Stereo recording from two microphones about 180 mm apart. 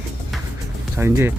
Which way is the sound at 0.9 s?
15° right (ahead or behind).